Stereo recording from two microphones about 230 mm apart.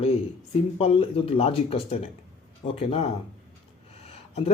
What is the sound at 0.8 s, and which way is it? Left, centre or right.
Speech, left.